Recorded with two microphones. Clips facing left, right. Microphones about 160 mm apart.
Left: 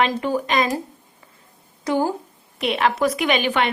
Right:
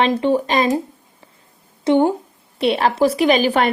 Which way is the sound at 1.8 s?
25° right (ahead or behind).